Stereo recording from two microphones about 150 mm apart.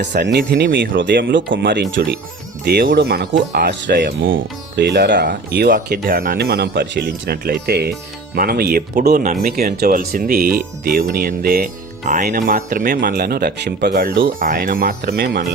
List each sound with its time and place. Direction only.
0.1 s speech: 90° right
9.3 s speech: 65° right (ahead or behind); by 15.4 s 90° right